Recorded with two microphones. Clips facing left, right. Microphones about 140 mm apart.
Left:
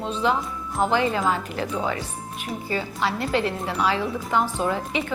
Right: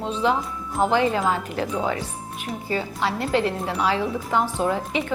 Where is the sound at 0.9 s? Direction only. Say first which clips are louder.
Right 1 dB; 25° right (ahead or behind).